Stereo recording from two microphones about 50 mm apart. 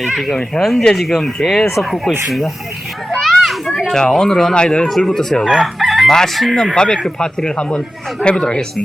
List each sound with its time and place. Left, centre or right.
0.6 s speech: centre
3.2 s children playing: centre
3.9 s speech: centre
5.0 s speech: centre
5.8 s chicken: centre
6.1 s speech: centre
6.7 s speech: centre